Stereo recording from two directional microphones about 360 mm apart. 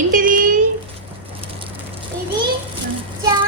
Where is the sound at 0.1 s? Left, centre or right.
Right.